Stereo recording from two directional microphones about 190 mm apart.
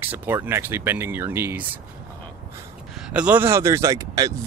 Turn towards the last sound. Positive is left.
turn(degrees=-20)  # may be behind; listen again after turning